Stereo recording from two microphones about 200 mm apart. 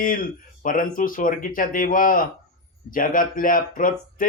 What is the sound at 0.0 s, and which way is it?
Speech, 45° left (ahead or behind).